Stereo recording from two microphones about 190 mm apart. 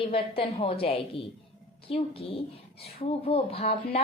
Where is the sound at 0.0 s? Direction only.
30° left (ahead or behind).